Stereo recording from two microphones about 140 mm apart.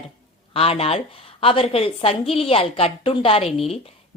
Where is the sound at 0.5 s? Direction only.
45° left (ahead or behind).